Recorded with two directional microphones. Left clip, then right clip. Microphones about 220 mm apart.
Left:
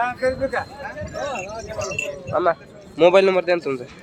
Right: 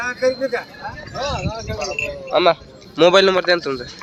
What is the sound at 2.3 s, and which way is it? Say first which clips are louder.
Speech: right 5 dB; 10° right (ahead or behind).